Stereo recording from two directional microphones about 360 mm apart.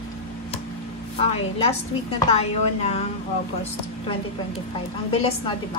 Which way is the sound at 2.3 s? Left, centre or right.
Centre.